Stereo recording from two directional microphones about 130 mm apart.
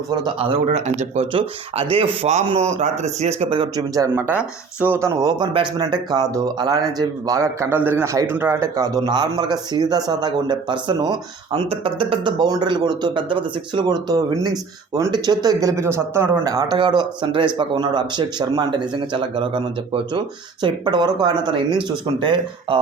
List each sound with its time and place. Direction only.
0.1 s speech: 35° right (ahead or behind); by 1.3 s 60° right (ahead or behind)
1.3 s speech: 40° right (ahead or behind)
2.6 s speech: 60° right (ahead or behind)
4.1 s speech: 15° right (ahead or behind)
5.3 s speech: 35° right (ahead or behind); by 16.4 s 15° right (ahead or behind)
16.4 s speech: 30° right (ahead or behind)